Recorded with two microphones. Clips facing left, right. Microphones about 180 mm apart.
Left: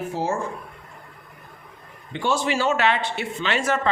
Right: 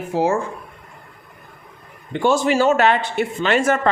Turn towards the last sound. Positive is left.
turn(degrees=-50)  # may be behind; listen again after turning